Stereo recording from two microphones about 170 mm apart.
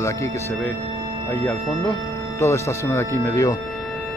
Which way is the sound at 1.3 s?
10° left (ahead or behind).